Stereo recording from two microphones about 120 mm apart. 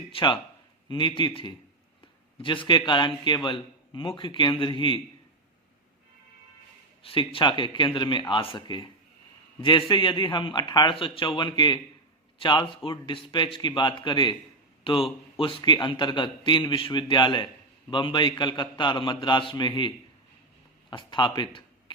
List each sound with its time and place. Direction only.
0.1 s a man's voice: 45° left (ahead or behind)
7.0 s a man's voice: 50° left (ahead or behind)
20.9 s speech: 40° left (ahead or behind)